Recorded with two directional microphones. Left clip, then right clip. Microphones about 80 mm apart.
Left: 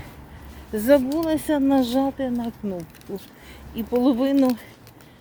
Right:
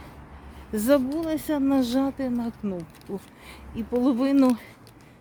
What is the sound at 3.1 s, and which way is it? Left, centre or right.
Speech, right.